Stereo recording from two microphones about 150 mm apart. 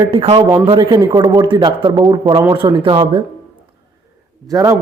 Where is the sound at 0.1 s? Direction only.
40° right (ahead or behind).